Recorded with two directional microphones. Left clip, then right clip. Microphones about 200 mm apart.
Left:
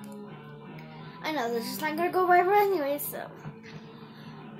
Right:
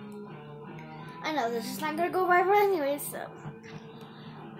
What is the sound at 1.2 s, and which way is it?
A woman's voice, 5° right (ahead or behind).